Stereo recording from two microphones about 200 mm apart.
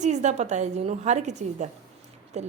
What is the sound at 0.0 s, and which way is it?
A woman's voice, 35° right (ahead or behind).